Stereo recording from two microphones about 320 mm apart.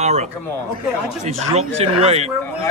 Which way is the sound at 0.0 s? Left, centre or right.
Centre.